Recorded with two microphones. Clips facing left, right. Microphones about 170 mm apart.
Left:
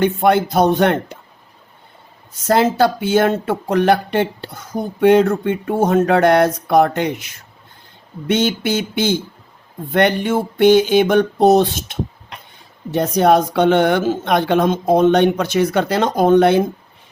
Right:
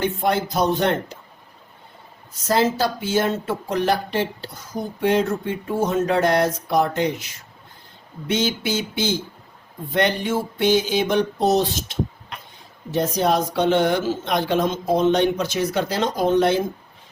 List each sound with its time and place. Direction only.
0.0 s speech: 60° left (ahead or behind)
2.5 s speech: 60° left (ahead or behind)
8.3 s speech: 60° left (ahead or behind)